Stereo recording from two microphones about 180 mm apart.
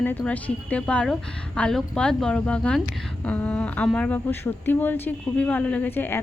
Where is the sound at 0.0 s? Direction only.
10° left (ahead or behind).